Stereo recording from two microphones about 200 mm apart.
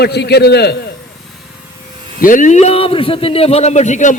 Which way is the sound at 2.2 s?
40° left (ahead or behind).